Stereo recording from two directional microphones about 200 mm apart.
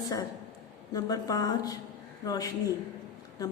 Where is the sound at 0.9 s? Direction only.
20° left (ahead or behind).